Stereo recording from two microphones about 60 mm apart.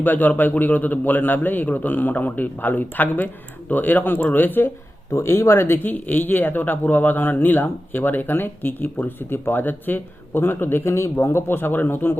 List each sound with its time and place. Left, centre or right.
0.0 s a man's voice: left
5.1 s speech: left
10.9 s speech: left